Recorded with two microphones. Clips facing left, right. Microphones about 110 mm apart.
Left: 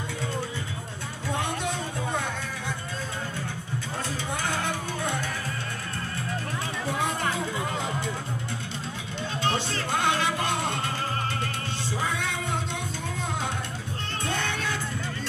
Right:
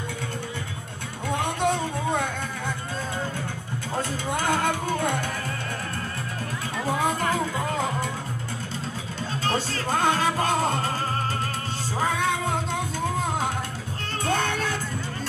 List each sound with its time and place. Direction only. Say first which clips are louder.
1.6 s music: right 6 dB; 55° right (ahead or behind)
4.4 s music: right 7 dB; 50° right (ahead or behind)
9.4 s music: right 1 dB; 40° right (ahead or behind)
12.0 s music: right 8 dB; 45° right (ahead or behind)
14.2 s music: right 6 dB; 45° right (ahead or behind)